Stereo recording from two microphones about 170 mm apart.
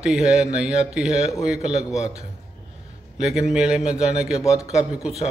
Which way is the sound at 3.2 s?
5° right (ahead or behind).